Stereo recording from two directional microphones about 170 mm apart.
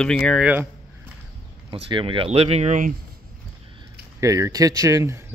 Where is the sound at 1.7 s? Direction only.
30° right (ahead or behind).